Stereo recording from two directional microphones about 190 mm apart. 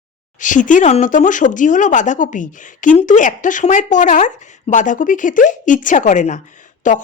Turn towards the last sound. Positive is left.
turn(degrees=40)  # may be behind; listen again after turning